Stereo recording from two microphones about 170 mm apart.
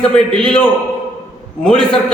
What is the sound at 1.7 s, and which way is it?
Speech, 5° left (ahead or behind).